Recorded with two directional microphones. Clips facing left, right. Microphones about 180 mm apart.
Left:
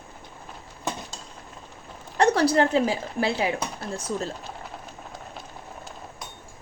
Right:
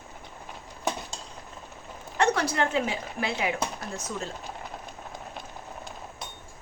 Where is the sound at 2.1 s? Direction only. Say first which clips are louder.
Left 5 dB; 35° left (ahead or behind).